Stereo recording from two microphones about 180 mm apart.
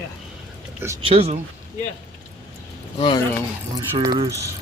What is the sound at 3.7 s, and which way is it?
Speech, 20° right (ahead or behind).